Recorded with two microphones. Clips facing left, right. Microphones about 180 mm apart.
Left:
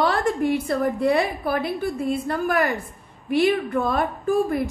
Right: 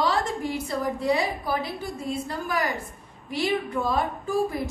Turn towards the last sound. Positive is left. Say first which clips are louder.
# left 5 dB
turn(degrees=60)  # may be behind; listen again after turning